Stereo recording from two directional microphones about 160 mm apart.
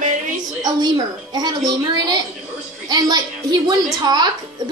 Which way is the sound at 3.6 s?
25° right (ahead or behind).